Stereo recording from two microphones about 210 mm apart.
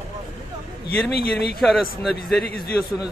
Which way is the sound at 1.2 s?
50° left (ahead or behind).